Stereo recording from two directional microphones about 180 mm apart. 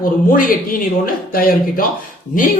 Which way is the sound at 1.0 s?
55° left (ahead or behind).